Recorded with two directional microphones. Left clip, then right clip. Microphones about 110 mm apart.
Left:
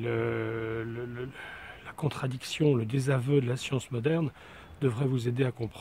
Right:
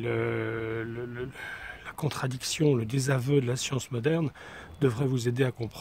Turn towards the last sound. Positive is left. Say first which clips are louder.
# right 2 dB
turn(degrees=-45)  # may be behind; listen again after turning